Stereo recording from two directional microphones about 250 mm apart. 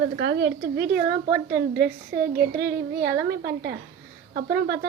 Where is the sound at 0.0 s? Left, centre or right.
Right.